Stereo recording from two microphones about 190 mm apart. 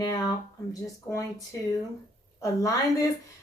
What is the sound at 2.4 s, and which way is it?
Speech, 15° left (ahead or behind).